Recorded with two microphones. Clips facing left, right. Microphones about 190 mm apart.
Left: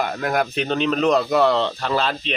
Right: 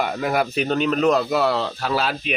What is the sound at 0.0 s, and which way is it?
Speech, 5° right (ahead or behind).